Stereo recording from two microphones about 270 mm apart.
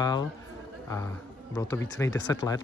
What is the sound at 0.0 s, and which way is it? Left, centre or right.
Speech, centre.